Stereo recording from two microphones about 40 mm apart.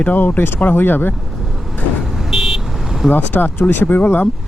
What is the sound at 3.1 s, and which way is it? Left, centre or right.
Speech, left.